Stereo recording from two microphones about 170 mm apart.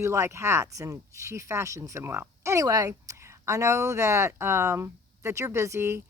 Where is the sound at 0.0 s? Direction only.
15° right (ahead or behind).